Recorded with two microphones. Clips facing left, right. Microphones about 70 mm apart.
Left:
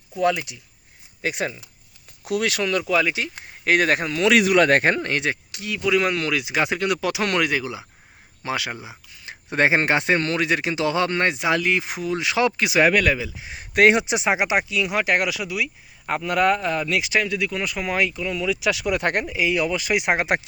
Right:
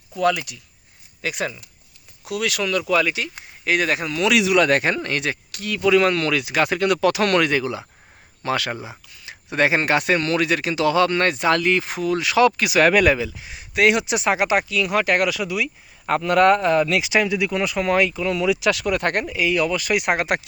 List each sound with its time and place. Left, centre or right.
0.2 s speech: left
2.8 s speech: centre
3.6 s speech: left; by 8.7 s centre
8.7 s speech: centre
9.2 s speech: left
12.9 s speech: centre
13.3 s speech: left
13.6 s speech: left
13.9 s speech: left; by 18.9 s centre
18.9 s speech: centre